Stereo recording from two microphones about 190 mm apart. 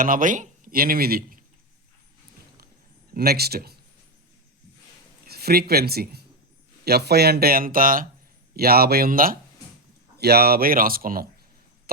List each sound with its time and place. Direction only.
0.0 s speech: 45° right (ahead or behind)
3.2 s speech: 55° right (ahead or behind)
5.3 s speech: 55° right (ahead or behind)